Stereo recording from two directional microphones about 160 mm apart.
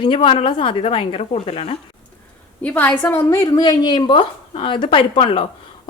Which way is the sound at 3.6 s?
25° left (ahead or behind).